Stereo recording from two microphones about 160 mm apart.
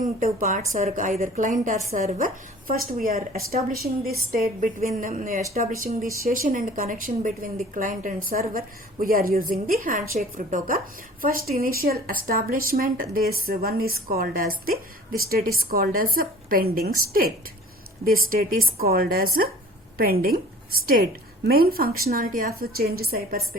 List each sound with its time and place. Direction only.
0.2 s a woman's voice: 50° right (ahead or behind); by 23.6 s 70° right (ahead or behind)